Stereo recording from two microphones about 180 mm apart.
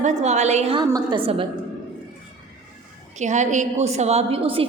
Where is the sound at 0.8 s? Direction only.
20° right (ahead or behind).